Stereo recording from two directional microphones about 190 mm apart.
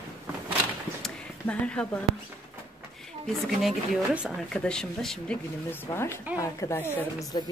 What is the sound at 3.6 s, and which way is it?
A woman's voice, 5° right (ahead or behind).